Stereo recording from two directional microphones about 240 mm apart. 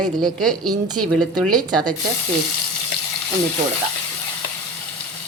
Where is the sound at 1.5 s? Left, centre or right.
Centre.